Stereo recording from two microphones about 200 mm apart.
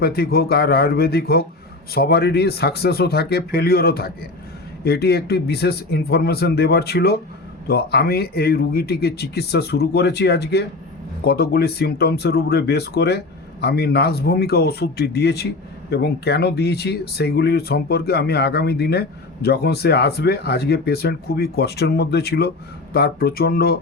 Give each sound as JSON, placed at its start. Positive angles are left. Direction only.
{"t": 0.0, "sound": "speech", "side_deg": 50}